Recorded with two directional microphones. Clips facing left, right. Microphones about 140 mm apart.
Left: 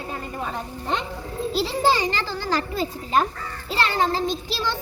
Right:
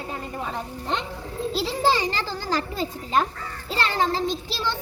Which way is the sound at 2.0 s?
35° right (ahead or behind).